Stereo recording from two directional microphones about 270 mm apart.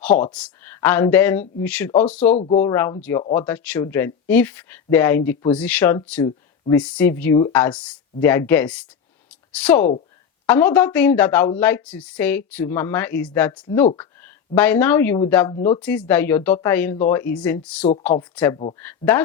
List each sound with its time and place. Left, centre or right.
0.0 s speech: centre
2.3 s speech: left
2.6 s speech: centre
15.5 s speech: left
15.8 s speech: centre